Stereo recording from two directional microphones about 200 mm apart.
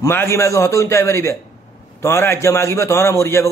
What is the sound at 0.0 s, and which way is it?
A man's voice, 15° left (ahead or behind).